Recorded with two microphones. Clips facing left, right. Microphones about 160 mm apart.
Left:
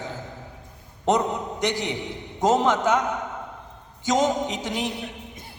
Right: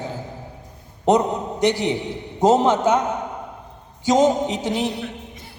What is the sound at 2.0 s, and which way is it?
Music, 15° left (ahead or behind).